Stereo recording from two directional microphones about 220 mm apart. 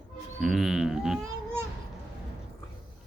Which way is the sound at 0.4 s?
Centre (ahead or behind).